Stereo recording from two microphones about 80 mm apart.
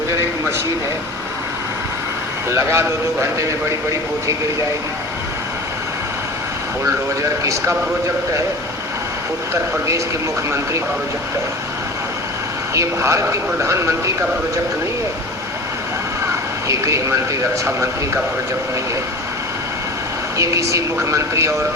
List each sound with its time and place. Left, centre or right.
2.5 s speech: right
6.8 s speech: right
12.7 s speech: right
16.6 s speech: right
20.4 s speech: right